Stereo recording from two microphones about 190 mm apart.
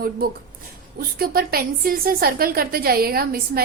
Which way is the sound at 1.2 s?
50° right (ahead or behind).